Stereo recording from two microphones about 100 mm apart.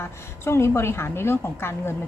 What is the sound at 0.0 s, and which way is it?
Speech, 25° left (ahead or behind).